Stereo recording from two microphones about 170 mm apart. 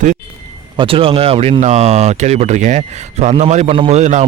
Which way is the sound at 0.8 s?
30° right (ahead or behind).